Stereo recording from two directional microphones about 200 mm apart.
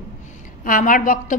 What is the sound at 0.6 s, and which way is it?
Speech, 40° left (ahead or behind).